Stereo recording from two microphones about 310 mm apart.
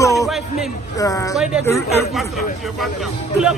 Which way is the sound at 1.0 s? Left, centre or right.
Centre.